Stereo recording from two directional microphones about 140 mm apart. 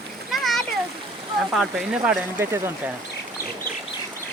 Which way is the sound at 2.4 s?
15° right (ahead or behind).